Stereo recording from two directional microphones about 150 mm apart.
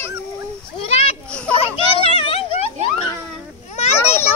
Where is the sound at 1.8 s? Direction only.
35° left (ahead or behind).